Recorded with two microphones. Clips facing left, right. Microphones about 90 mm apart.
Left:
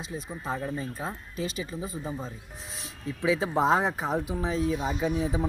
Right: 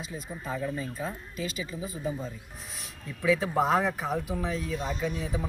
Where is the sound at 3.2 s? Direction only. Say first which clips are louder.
Left 1 dB; 25° left (ahead or behind).